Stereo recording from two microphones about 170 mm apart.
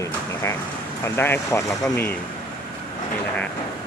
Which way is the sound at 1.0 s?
15° left (ahead or behind).